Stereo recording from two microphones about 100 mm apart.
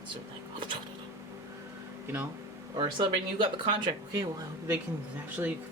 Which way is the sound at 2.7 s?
50° right (ahead or behind).